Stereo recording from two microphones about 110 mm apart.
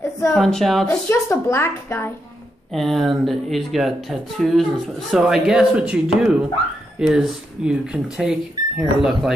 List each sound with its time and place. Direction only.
0.3 s speech: 5° left (ahead or behind)
0.8 s a woman's voice: 25° left (ahead or behind)
2.7 s speech: centre (ahead or behind)